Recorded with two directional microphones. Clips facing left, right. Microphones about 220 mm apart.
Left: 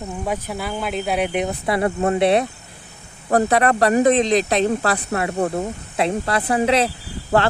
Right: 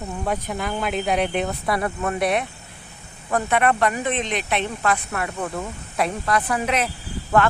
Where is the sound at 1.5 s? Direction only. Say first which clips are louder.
Left 4 dB; 25° left (ahead or behind).